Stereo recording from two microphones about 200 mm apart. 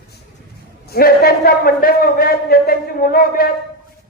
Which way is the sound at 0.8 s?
50° left (ahead or behind).